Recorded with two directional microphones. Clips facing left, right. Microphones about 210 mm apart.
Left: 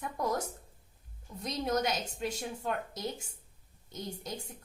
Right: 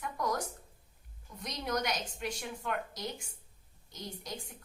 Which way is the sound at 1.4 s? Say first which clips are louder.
Left 3 dB; 25° left (ahead or behind).